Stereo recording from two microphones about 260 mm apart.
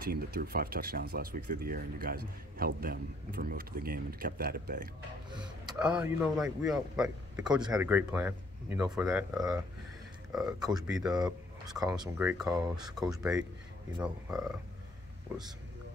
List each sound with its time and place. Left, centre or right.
0.0 s speech: right
5.7 s speech: centre
10.3 s speech: centre
11.8 s speech: centre
12.8 s speech: centre